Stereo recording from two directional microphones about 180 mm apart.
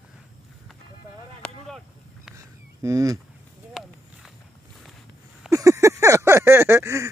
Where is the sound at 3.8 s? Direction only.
Centre (ahead or behind).